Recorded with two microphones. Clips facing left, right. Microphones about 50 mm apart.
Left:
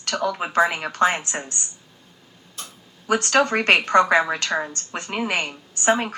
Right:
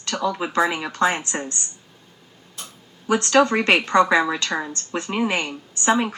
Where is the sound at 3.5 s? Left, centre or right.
Left.